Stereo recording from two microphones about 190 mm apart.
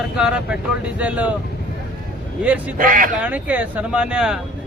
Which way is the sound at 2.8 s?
45° right (ahead or behind).